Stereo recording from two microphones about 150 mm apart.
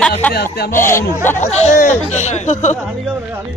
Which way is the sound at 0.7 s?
15° left (ahead or behind).